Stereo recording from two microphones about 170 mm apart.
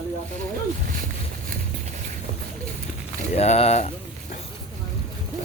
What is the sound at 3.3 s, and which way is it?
Speech, 40° left (ahead or behind).